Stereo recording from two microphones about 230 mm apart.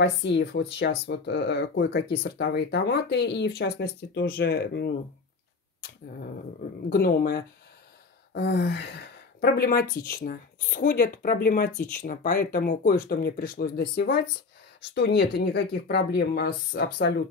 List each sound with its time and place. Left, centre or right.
0.0 s speech: left
6.9 s speech: left